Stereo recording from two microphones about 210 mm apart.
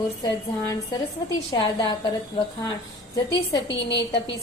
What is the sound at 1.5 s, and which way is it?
Speech, 20° left (ahead or behind).